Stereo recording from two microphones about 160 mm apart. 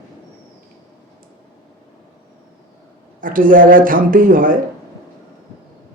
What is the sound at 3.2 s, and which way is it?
A man's voice, 60° right (ahead or behind).